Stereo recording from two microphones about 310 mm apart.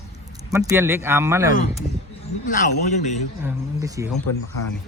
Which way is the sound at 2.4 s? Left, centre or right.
Left.